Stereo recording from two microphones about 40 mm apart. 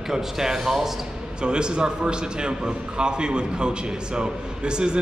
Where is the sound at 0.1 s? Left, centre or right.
Centre.